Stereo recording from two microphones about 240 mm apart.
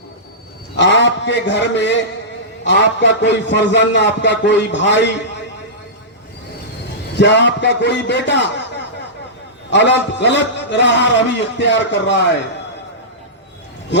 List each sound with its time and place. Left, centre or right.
0.8 s a man's voice: left
7.2 s a man's voice: left